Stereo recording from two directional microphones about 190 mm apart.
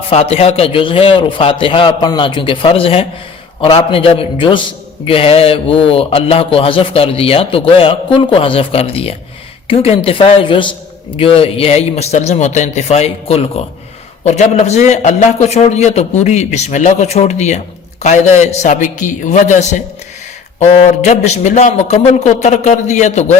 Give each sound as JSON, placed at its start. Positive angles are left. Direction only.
{"t": 0.1, "sound": "a man's voice", "side_deg": 30}